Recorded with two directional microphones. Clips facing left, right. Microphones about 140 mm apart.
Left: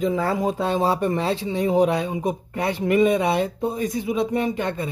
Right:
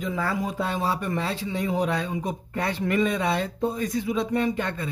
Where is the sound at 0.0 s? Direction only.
25° left (ahead or behind).